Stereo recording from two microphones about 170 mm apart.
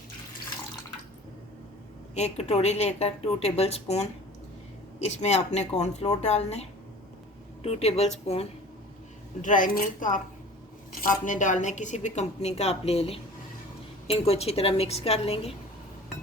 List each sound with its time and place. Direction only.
2.1 s a woman's voice: 40° left (ahead or behind)
9.4 s a woman's voice: 50° left (ahead or behind)
11.3 s a woman's voice: 50° left (ahead or behind)